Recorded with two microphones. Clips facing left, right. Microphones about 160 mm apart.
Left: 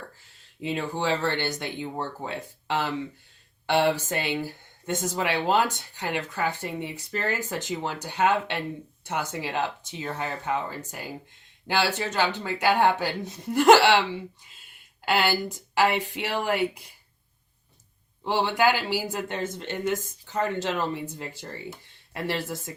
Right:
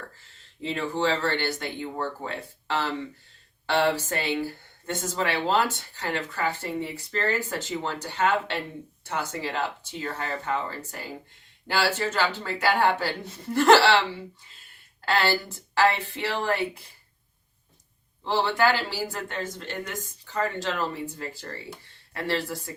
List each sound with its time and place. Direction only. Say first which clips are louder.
0.6 s speech: right 1 dB; 15° left (ahead or behind)
15.0 s speech: even; 15° left (ahead or behind)
18.2 s speech: even; 15° left (ahead or behind)